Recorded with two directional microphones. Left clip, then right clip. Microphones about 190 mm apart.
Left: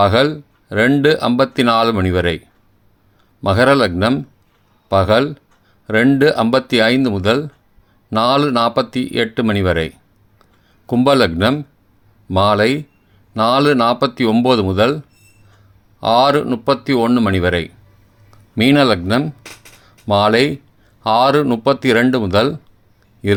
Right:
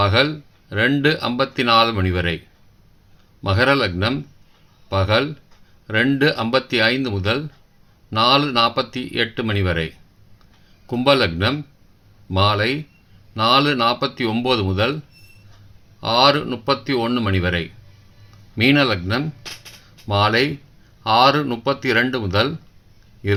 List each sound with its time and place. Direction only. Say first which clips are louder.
0.0 s speech: left 4 dB; 55° left (ahead or behind)
3.4 s speech: left 5 dB; 55° left (ahead or behind)
16.0 s speech: left 3 dB; 55° left (ahead or behind)